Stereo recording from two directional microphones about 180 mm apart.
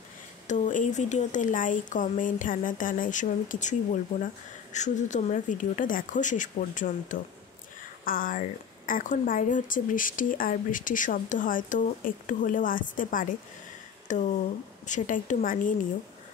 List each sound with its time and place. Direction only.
0.5 s a woman's voice: 45° left (ahead or behind)